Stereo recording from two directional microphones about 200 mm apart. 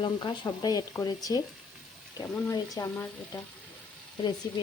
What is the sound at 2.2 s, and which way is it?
Speech, 15° left (ahead or behind).